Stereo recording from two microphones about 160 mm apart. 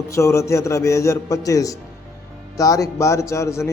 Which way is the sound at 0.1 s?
20° left (ahead or behind).